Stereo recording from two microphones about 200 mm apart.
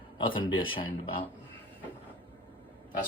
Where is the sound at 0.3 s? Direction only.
25° left (ahead or behind).